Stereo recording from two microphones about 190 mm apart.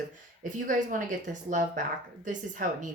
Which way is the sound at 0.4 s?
45° right (ahead or behind).